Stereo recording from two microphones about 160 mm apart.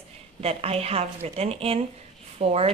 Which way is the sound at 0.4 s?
40° right (ahead or behind).